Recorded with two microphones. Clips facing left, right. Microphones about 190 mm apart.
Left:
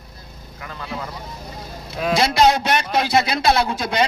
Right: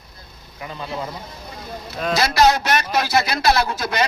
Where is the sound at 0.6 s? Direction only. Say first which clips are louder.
Right 3 dB; 20° right (ahead or behind).